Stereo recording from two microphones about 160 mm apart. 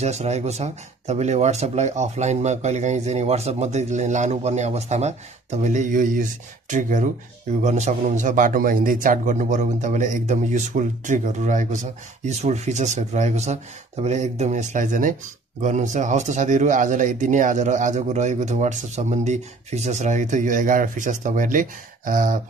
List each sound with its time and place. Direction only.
0.0 s a man's voice: 45° right (ahead or behind)